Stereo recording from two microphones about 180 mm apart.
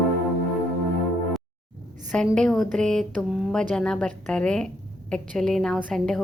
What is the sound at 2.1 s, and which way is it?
Speech, centre (ahead or behind).